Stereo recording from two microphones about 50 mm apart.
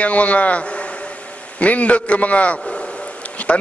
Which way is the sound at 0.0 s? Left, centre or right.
Left.